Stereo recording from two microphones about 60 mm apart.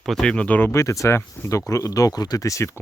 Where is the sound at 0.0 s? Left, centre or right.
Centre.